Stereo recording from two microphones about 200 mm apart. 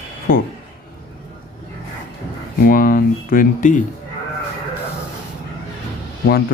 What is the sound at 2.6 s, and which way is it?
Speech, 45° left (ahead or behind).